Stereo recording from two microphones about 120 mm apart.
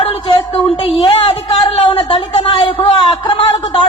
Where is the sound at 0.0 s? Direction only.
50° left (ahead or behind).